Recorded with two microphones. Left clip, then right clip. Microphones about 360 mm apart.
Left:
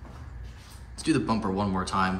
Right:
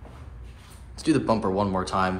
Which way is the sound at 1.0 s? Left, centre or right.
Centre.